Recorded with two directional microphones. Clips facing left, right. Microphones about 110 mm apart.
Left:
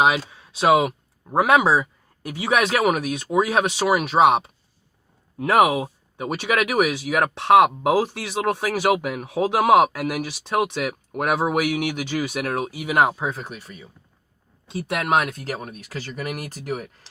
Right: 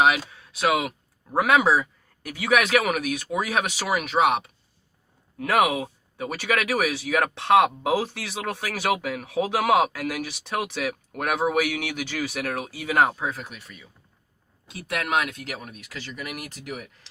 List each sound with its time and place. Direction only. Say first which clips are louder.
0.0 s speech: left 1 dB; 25° left (ahead or behind)